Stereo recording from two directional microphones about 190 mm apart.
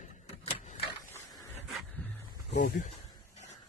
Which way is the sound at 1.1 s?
15° left (ahead or behind).